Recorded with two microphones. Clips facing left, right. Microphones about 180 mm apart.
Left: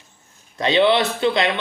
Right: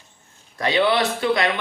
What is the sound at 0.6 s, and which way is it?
Speech, 25° left (ahead or behind).